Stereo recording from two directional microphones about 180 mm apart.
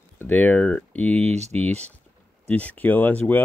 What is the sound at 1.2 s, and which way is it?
Speech, 35° right (ahead or behind).